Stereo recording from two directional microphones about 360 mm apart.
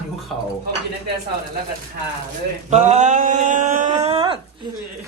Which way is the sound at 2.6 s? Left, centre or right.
Centre.